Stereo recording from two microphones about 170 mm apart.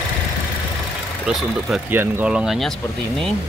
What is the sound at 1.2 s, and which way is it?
Speech, 5° right (ahead or behind).